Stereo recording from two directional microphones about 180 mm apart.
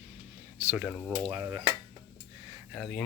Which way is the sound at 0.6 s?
10° right (ahead or behind).